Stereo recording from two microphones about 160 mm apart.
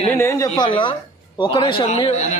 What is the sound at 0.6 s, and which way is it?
A man's voice, 30° left (ahead or behind).